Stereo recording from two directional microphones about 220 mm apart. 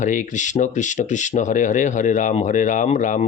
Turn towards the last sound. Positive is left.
turn(degrees=35)  # may be behind; listen again after turning